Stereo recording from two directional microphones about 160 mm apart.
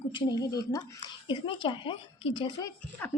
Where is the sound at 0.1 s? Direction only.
30° left (ahead or behind).